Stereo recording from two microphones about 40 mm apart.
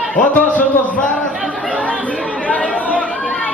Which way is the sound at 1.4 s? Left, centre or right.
Left.